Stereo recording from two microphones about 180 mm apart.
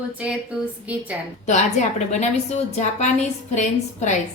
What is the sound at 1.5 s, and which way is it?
A woman's voice, 40° left (ahead or behind).